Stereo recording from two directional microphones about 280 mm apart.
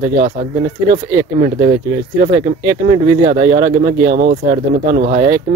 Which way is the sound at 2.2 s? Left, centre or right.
Right.